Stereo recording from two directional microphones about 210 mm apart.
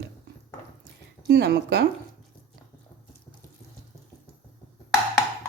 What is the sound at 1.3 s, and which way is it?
Speech, 50° right (ahead or behind).